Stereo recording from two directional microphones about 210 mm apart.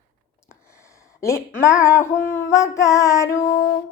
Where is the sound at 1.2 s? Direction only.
15° left (ahead or behind).